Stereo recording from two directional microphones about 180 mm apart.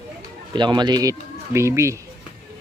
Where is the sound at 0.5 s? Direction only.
25° right (ahead or behind).